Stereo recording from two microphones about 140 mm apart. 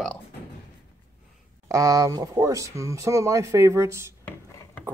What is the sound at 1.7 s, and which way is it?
Speech, 25° right (ahead or behind).